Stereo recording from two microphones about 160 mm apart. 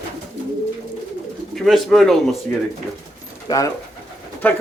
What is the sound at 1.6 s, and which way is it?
Speech, centre (ahead or behind).